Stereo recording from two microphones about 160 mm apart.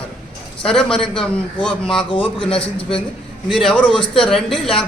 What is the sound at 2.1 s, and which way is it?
Speech, 35° left (ahead or behind).